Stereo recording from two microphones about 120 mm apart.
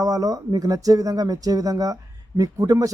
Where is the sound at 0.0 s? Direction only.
30° right (ahead or behind).